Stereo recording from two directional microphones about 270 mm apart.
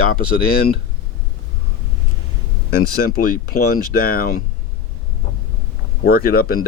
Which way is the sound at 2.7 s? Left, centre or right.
Left.